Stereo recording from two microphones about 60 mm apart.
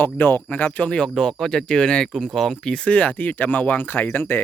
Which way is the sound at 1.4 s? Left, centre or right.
Centre.